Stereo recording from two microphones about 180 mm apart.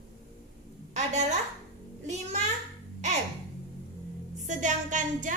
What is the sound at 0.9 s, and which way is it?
A woman's voice, 40° right (ahead or behind).